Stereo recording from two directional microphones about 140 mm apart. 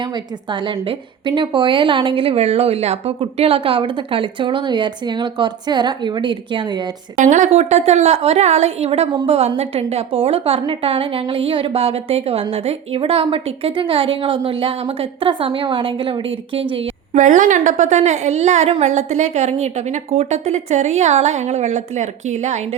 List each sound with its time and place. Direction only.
0.5 s a woman's voice: 35° right (ahead or behind)
7.2 s a woman's voice: 60° right (ahead or behind); by 16.8 s 40° right (ahead or behind)
17.2 s a woman's voice: 65° right (ahead or behind)